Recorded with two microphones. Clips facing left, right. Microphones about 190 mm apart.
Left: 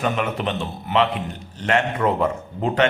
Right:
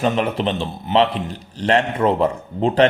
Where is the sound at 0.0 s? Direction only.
30° right (ahead or behind).